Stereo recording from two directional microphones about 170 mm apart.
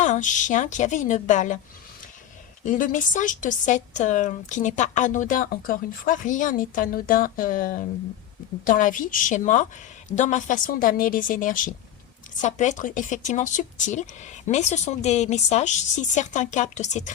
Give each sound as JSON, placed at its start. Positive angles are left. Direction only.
{"t": 0.0, "sound": "speech", "side_deg": 45}
{"t": 2.6, "sound": "speech", "side_deg": 50}